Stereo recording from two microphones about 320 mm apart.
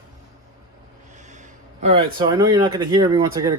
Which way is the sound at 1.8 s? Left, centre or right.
Centre.